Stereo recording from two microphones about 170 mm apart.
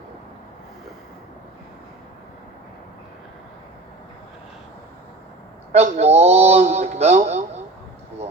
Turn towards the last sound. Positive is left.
turn(degrees=-40)  # may be behind; listen again after turning